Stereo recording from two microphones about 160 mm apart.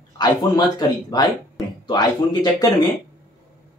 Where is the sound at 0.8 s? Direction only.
25° left (ahead or behind).